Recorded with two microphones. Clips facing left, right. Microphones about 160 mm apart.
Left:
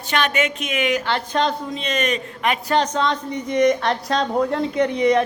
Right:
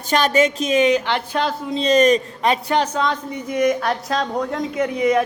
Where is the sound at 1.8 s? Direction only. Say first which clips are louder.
Right 8 dB; 35° right (ahead or behind).